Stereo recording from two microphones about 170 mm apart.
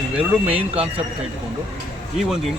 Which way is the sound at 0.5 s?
35° right (ahead or behind).